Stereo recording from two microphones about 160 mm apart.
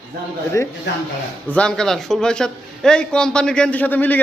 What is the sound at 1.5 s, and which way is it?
A man's voice, 5° left (ahead or behind).